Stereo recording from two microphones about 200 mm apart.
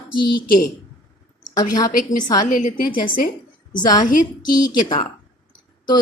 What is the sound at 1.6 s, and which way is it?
Speech, 20° left (ahead or behind).